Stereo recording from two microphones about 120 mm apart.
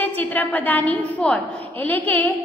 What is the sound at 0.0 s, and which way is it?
A woman's voice, 15° left (ahead or behind).